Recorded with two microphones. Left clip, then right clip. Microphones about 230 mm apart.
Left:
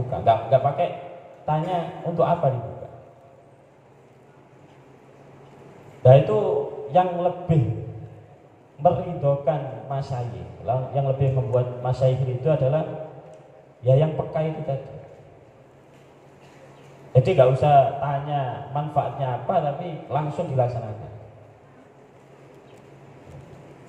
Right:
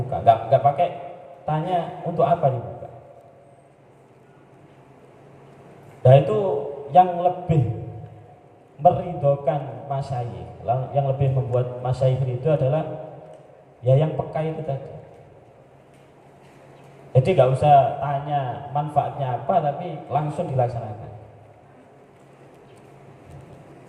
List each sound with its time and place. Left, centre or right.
0.1 s a sound: right
1.5 s a man's voice: right
6.0 s a man's voice: right
8.8 s a man's voice: right
13.8 s a man's voice: right
17.1 s a man's voice: right